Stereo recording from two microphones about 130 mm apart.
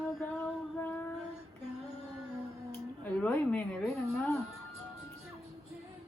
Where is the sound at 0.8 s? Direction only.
15° left (ahead or behind).